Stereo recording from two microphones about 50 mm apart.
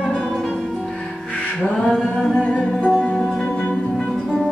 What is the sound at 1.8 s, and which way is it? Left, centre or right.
Singing, centre.